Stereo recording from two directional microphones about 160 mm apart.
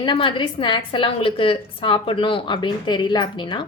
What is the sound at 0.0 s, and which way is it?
A woman's voice, 30° left (ahead or behind).